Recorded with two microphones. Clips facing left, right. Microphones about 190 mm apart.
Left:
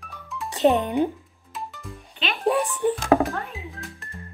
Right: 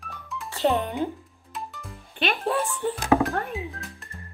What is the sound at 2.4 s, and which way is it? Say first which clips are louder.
Speech: left 9 dB; 15° left (ahead or behind).